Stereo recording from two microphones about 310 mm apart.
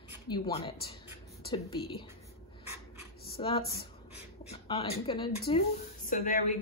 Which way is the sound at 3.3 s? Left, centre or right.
Centre.